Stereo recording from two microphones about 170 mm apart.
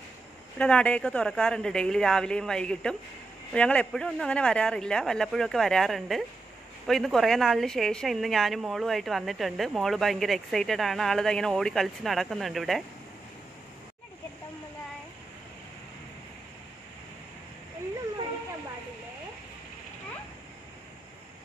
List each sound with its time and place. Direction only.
0.6 s speech: 5° left (ahead or behind)